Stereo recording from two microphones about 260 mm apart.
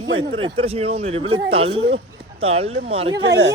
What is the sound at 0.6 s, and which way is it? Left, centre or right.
Speech, right.